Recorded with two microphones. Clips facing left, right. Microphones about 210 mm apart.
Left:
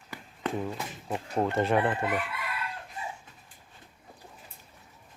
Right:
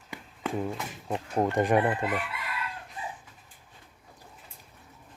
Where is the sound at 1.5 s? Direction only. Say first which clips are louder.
Right 2 dB; 15° right (ahead or behind).